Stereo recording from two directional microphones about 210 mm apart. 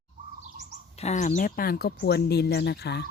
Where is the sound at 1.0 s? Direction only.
35° left (ahead or behind); by 3.0 s 50° left (ahead or behind).